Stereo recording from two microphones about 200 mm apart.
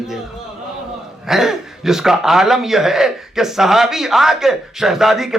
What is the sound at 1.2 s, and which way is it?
Speech, centre (ahead or behind).